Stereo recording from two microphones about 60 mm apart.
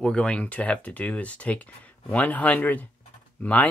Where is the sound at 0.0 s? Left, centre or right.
Centre.